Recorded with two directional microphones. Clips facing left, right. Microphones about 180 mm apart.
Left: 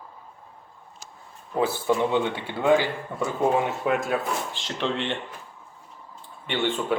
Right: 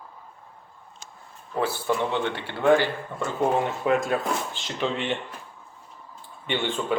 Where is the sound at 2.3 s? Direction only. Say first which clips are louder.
Right 1 dB; 15° left (ahead or behind); by 5.1 s 5° right (ahead or behind).